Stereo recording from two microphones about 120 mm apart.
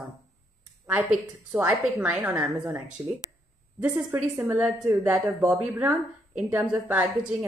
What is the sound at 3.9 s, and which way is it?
A woman's voice, 20° right (ahead or behind).